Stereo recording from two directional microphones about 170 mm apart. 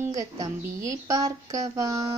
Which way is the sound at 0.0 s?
20° right (ahead or behind).